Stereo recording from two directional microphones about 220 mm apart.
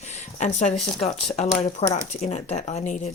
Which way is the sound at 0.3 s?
35° left (ahead or behind).